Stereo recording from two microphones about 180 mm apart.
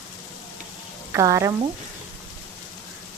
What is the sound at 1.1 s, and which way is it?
Speech, 15° right (ahead or behind).